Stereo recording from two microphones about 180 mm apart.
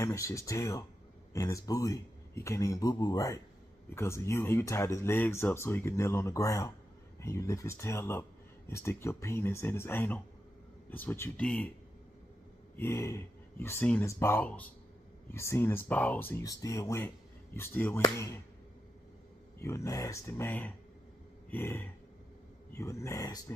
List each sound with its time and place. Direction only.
0.0 s speech: 15° left (ahead or behind)
12.7 s speech: 15° left (ahead or behind)
19.6 s speech: 15° left (ahead or behind)
21.5 s a sound: 10° left (ahead or behind)
22.7 s speech: 15° left (ahead or behind)